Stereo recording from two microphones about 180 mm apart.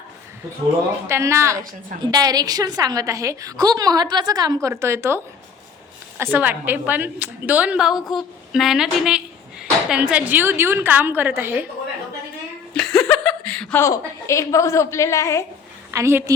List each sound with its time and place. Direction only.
1.0 s a woman's voice: 15° right (ahead or behind)
12.7 s a sound: 5° left (ahead or behind)
13.8 s a woman's voice: 15° left (ahead or behind)
15.9 s a woman's voice: 15° right (ahead or behind)